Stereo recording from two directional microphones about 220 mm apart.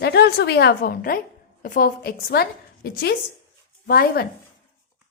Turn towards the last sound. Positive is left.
turn(degrees=45)  # may be behind; listen again after turning